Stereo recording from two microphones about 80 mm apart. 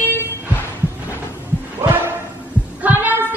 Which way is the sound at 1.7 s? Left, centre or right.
Right.